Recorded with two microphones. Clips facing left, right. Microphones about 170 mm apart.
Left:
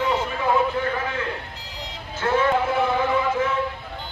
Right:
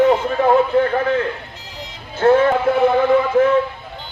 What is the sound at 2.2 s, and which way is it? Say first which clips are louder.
A man's voice: right 7 dB; 50° right (ahead or behind).